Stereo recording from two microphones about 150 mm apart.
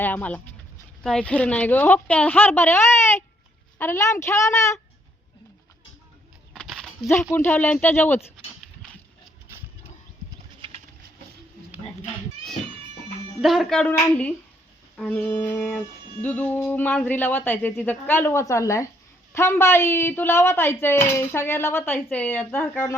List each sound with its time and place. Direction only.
0.0 s a woman's voice: 10° left (ahead or behind)
6.5 s a sound: centre (ahead or behind)
7.1 s speech: 15° left (ahead or behind)
9.5 s a sound: 15° right (ahead or behind)
13.4 s music: centre (ahead or behind)
15.1 s speech: 10° left (ahead or behind)